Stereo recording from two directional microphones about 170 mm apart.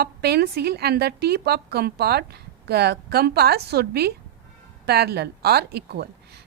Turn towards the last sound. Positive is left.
turn(degrees=-70)  # may be behind; listen again after turning